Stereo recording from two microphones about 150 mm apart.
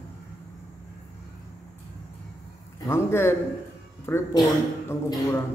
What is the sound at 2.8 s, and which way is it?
A man's voice, 15° left (ahead or behind).